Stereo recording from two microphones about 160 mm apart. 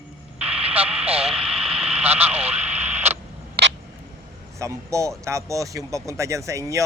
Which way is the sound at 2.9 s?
15° right (ahead or behind).